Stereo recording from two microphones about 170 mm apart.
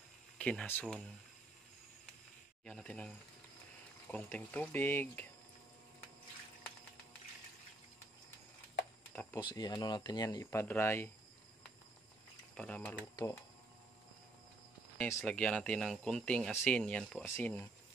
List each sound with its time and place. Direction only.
0.4 s speech: 5° left (ahead or behind)
2.6 s speech: 5° left (ahead or behind)
9.1 s a sound: 10° left (ahead or behind)
9.5 s speech: 25° left (ahead or behind)
12.5 s speech: 10° left (ahead or behind)
15.0 s speech: 10° left (ahead or behind)